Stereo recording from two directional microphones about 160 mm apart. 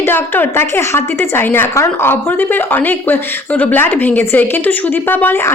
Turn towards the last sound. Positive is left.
turn(degrees=10)  # may be behind; listen again after turning